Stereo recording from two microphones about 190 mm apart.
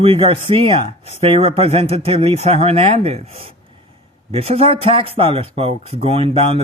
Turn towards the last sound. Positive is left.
turn(degrees=-30)  # may be behind; listen again after turning